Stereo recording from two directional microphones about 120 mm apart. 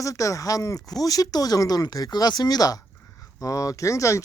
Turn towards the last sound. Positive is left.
turn(degrees=25)  # may be behind; listen again after turning